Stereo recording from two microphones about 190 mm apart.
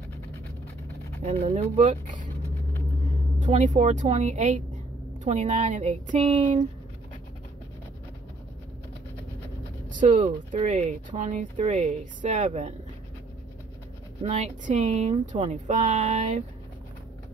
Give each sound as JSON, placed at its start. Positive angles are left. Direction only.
{"t": 1.2, "sound": "speech", "side_deg": -35}
{"t": 3.3, "sound": "speech", "side_deg": -40}
{"t": 9.9, "sound": "speech", "side_deg": -40}
{"t": 14.2, "sound": "speech", "side_deg": -40}